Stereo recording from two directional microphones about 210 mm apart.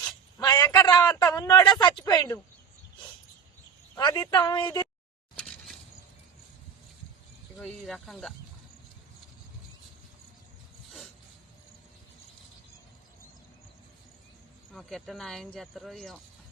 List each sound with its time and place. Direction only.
0.3 s a man's voice: 15° left (ahead or behind)
3.9 s speech: 20° left (ahead or behind)
5.4 s a sound: centre (ahead or behind)
7.6 s speech: centre (ahead or behind)
14.7 s speech: centre (ahead or behind)